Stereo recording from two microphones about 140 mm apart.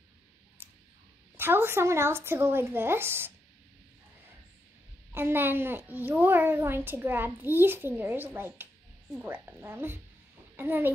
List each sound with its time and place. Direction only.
0.6 s a sound: 15° right (ahead or behind)
1.3 s a child's voice: 15° right (ahead or behind)
5.1 s a child's voice: 15° right (ahead or behind)